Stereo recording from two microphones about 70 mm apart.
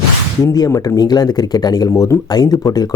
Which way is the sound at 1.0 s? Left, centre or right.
Left.